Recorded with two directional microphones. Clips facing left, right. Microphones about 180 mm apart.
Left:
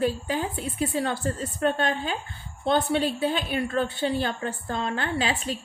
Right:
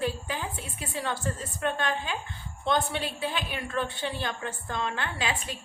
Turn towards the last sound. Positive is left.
turn(degrees=35)  # may be behind; listen again after turning